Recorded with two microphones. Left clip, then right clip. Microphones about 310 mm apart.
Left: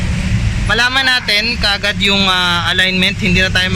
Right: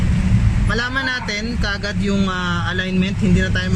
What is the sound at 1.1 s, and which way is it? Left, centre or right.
Speech, left.